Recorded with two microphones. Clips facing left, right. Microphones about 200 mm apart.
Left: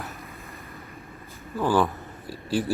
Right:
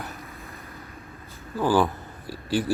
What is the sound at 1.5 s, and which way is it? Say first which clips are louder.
Speech: right 1 dB; centre (ahead or behind).